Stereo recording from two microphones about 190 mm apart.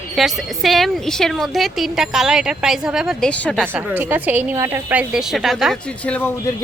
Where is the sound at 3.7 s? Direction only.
10° right (ahead or behind).